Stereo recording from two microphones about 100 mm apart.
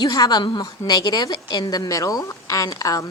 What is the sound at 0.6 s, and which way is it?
A woman's voice, 40° left (ahead or behind).